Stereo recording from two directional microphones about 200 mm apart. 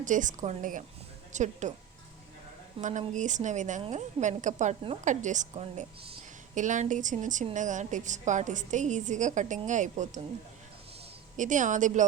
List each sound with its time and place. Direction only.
0.0 s a woman's voice: 40° right (ahead or behind)
2.8 s a woman's voice: 40° right (ahead or behind)
11.3 s a woman's voice: 40° right (ahead or behind)